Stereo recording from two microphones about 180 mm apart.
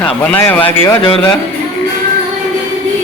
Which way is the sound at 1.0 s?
30° left (ahead or behind).